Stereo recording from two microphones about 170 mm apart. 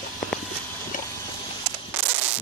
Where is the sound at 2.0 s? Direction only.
10° right (ahead or behind).